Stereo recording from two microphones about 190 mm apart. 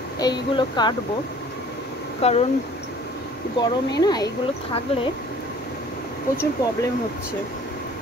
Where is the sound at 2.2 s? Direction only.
35° left (ahead or behind).